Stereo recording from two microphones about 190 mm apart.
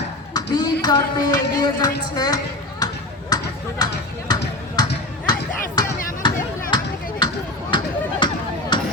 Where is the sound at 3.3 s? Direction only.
20° left (ahead or behind).